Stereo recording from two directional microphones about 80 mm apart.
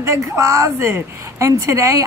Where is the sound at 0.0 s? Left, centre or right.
Right.